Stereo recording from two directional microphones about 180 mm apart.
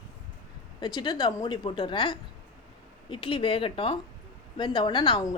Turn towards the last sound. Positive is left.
turn(degrees=25)  # may be behind; listen again after turning